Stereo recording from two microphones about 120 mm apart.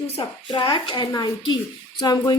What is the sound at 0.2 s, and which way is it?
A woman's voice, 45° left (ahead or behind).